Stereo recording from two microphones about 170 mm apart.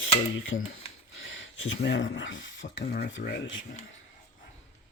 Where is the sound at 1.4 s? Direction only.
90° left.